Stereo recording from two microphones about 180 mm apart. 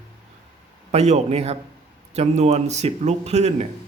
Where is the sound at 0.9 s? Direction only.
40° right (ahead or behind).